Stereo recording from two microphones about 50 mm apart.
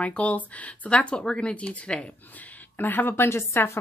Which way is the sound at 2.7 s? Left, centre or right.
Left.